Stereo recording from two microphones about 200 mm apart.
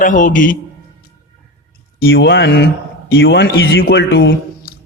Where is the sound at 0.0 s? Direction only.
40° left (ahead or behind).